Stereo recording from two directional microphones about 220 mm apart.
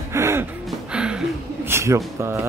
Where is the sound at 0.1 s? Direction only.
10° right (ahead or behind).